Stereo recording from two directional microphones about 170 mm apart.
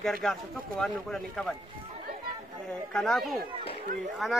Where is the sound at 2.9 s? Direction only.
Centre (ahead or behind).